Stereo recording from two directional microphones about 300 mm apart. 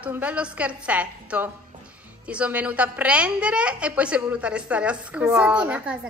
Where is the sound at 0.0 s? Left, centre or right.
Centre.